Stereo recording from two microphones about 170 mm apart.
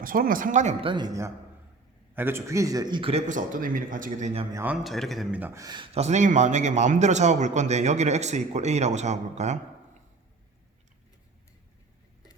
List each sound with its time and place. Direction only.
0.0 s a man's voice: 55° right (ahead or behind)
0.9 s a man's voice: 25° right (ahead or behind); by 4.3 s 50° right (ahead or behind)
4.5 s speech: 10° right (ahead or behind)
5.6 s a man's voice: 30° right (ahead or behind)